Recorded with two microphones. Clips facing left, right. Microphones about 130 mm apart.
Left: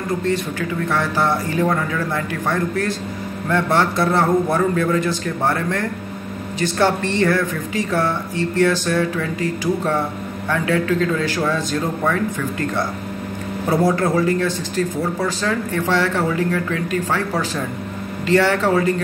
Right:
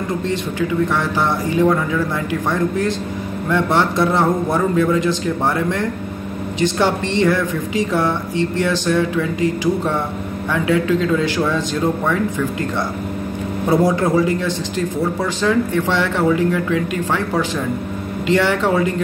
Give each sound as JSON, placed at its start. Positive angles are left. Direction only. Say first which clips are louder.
{"t": 0.2, "sound": "a man's voice", "louder": "right 1 dB", "side_deg": -15}
{"t": 10.5, "sound": "a man's voice", "louder": "right 2 dB", "side_deg": -15}